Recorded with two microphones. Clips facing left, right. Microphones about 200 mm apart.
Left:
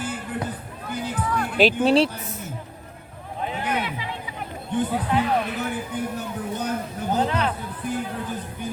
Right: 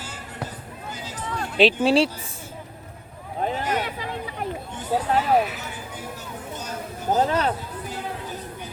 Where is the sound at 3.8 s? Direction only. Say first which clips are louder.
Even; 45° right (ahead or behind).